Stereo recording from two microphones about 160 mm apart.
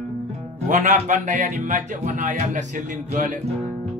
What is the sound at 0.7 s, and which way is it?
Speech, 55° right (ahead or behind).